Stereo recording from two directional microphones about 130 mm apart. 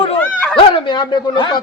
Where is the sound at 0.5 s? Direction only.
40° left (ahead or behind).